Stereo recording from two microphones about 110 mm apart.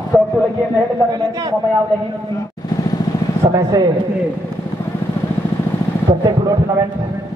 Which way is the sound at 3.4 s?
30° right (ahead or behind).